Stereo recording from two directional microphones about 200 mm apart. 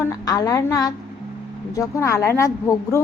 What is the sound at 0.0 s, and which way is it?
A woman's voice, 15° left (ahead or behind).